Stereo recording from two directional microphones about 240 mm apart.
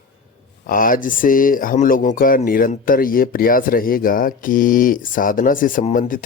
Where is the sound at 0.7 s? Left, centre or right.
Left.